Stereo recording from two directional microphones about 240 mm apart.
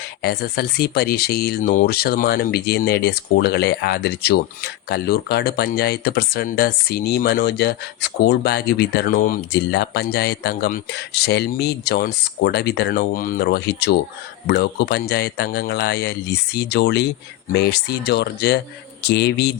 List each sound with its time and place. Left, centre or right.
0.2 s speech: left